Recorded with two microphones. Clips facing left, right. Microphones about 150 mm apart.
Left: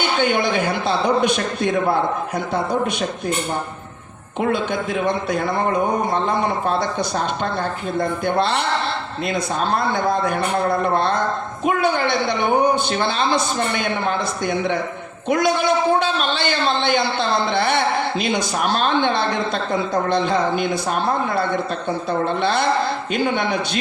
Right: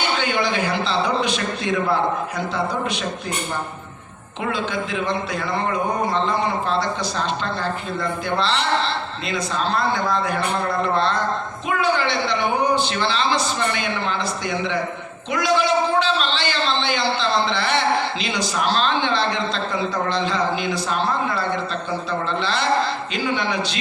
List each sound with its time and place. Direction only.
0.2 s a man's voice: 50° left (ahead or behind)
4.4 s a man's voice: 50° left (ahead or behind)